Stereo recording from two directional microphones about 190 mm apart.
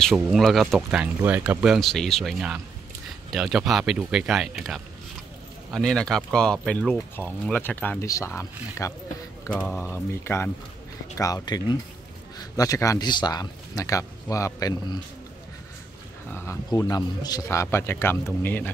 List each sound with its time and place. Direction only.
0.0 s speech: centre (ahead or behind); by 15.0 s 20° left (ahead or behind)
16.3 s speech: 15° left (ahead or behind)